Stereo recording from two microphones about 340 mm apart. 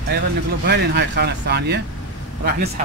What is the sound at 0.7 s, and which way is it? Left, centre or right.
Speech, right.